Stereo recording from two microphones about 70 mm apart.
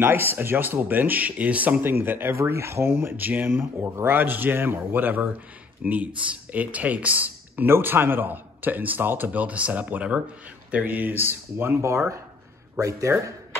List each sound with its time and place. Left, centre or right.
0.0 s speech: right